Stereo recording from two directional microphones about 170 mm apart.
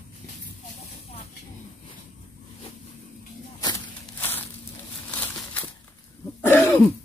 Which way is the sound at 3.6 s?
15° left (ahead or behind).